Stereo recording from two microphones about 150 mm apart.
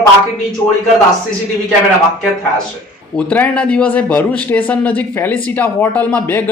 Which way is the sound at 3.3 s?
10° left (ahead or behind).